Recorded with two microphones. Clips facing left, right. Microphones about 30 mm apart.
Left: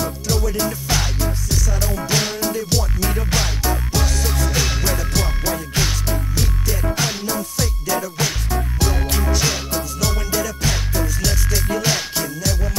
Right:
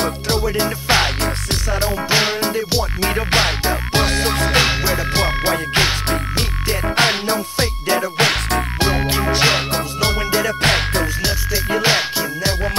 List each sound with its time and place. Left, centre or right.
0.0 s music: right
4.8 s music: right
8.7 s music: right
10.6 s music: right
11.2 s music: right